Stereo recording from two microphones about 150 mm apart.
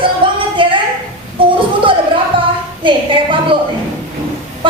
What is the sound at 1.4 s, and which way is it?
Music, 35° right (ahead or behind).